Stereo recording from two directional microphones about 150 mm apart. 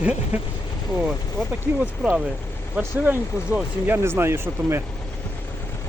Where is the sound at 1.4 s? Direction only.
5° left (ahead or behind).